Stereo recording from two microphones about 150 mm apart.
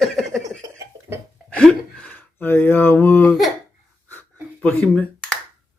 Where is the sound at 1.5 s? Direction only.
5° left (ahead or behind).